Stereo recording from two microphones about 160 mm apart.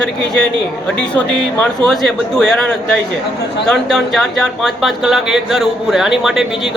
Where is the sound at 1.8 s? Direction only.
Centre (ahead or behind).